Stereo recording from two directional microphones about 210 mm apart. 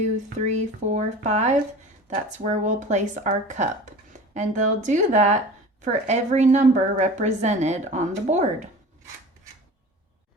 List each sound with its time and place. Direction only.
0.3 s a woman's voice: 35° right (ahead or behind)